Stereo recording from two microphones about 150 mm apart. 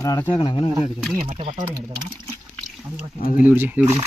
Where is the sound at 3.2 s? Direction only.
65° left (ahead or behind).